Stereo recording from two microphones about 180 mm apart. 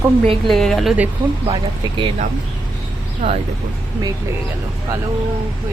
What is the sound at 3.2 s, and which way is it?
Speech, 35° right (ahead or behind).